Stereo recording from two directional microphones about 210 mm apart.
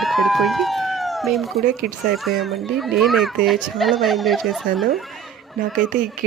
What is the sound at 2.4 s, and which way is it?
Speech, centre (ahead or behind).